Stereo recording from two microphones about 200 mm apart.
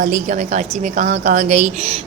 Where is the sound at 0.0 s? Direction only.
40° right (ahead or behind).